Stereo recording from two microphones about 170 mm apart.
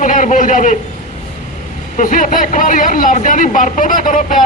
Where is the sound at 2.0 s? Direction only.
50° left (ahead or behind).